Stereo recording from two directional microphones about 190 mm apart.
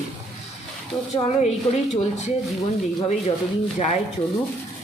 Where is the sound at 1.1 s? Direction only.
30° left (ahead or behind).